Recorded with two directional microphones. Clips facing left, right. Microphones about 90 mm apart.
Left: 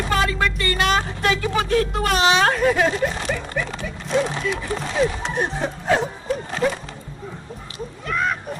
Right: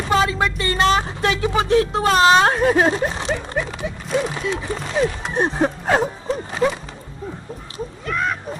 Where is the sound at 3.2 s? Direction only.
20° right (ahead or behind).